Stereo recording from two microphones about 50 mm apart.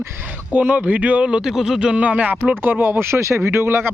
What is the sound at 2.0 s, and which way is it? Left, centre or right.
Speech, right.